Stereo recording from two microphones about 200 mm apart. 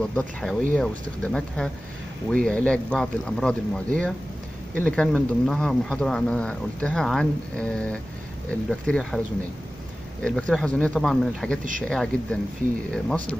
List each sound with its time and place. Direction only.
0.0 s speech: 5° left (ahead or behind)
4.8 s speech: 5° left (ahead or behind)
10.2 s speech: 5° left (ahead or behind)